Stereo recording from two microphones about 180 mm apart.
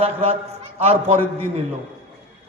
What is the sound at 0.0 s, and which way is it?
A man's voice, 30° right (ahead or behind).